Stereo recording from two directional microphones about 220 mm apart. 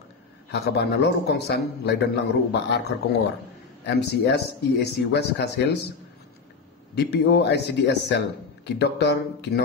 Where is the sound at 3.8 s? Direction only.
50° left (ahead or behind).